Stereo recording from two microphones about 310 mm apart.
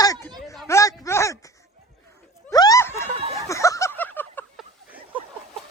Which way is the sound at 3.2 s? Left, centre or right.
Centre.